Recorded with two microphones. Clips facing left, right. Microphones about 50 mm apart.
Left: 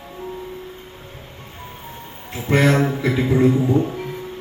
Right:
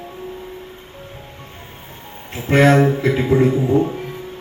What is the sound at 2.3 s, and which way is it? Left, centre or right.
Speech, right.